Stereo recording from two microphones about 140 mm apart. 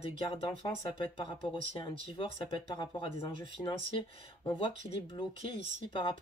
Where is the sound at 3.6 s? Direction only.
10° left (ahead or behind).